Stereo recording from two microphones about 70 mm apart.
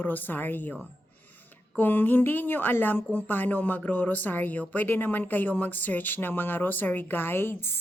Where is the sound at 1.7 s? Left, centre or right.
Left.